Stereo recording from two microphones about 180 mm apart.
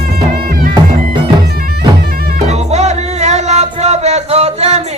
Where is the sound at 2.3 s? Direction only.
40° right (ahead or behind).